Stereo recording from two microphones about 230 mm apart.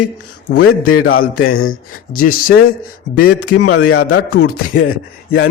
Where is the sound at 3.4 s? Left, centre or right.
Left.